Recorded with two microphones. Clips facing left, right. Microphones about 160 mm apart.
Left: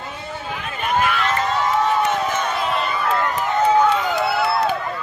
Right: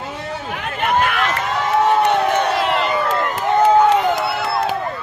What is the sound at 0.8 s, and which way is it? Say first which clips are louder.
Run: right 2 dB; 65° right (ahead or behind).